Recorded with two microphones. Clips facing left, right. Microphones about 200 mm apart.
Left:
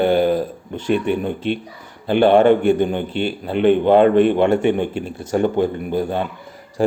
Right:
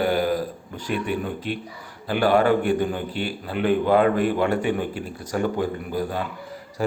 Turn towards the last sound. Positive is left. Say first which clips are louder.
# left 6 dB
turn(degrees=25)  # may be behind; listen again after turning